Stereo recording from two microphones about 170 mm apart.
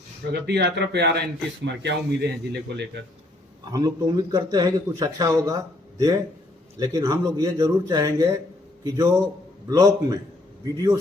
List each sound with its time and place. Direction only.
0.3 s a man's voice: 75° right (ahead or behind)
3.7 s a man's voice: 20° right (ahead or behind)